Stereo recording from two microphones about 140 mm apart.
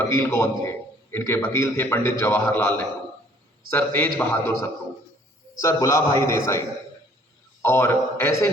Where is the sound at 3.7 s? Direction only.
15° left (ahead or behind).